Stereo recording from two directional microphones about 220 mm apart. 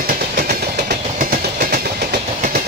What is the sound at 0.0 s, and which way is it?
Train, 45° right (ahead or behind).